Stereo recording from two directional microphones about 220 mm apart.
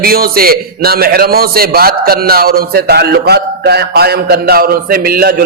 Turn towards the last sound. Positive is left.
turn(degrees=-45)  # may be behind; listen again after turning